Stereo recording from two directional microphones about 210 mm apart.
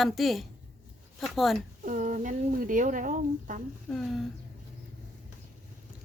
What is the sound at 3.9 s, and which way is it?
Speech, centre (ahead or behind).